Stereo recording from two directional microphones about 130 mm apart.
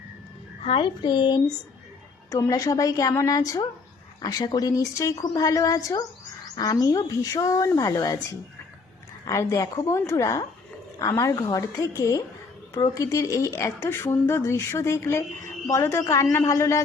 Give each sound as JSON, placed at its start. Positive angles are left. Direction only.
{"t": 0.6, "sound": "a woman's voice", "side_deg": 40}